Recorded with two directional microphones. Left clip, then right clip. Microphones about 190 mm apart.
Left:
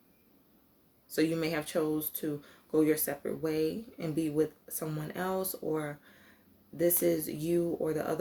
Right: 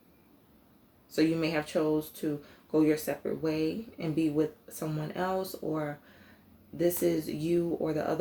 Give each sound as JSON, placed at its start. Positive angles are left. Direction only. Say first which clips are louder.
{"t": 1.1, "sound": "speech", "louder": "right 2 dB", "side_deg": 45}